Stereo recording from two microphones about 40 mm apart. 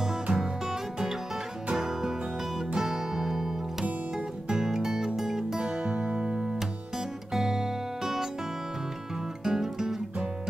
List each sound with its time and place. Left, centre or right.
0.0 s music: centre
4.6 s music: centre
5.6 s music: right
7.3 s music: centre
9.4 s music: centre